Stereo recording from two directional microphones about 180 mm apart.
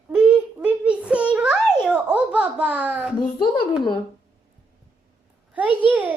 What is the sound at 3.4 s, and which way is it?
Speech, 25° left (ahead or behind).